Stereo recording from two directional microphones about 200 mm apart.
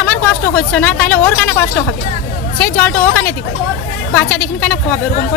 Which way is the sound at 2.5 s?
10° left (ahead or behind).